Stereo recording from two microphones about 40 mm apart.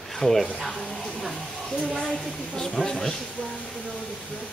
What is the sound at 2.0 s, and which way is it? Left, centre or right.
A woman's voice, centre.